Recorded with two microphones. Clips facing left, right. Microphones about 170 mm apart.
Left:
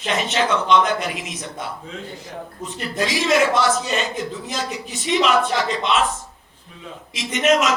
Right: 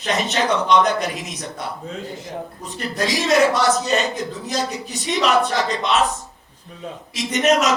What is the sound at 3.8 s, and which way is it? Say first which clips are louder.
Speech: right 3 dB; 40° right (ahead or behind).